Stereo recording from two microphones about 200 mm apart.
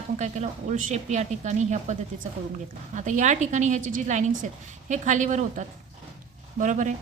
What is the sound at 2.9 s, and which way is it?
Speech, 40° right (ahead or behind).